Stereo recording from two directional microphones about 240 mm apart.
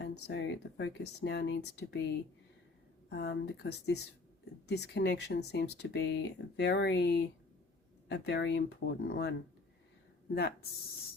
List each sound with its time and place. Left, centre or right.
0.0 s speech: left
3.1 s speech: left
10.3 s speech: left